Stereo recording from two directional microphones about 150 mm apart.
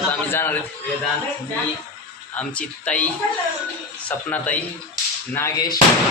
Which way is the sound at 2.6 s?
10° left (ahead or behind).